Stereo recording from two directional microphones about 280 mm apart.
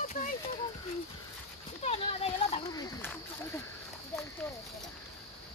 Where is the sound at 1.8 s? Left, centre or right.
Left.